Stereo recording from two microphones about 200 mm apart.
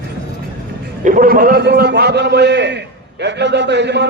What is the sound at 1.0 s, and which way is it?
A man's voice, 45° right (ahead or behind).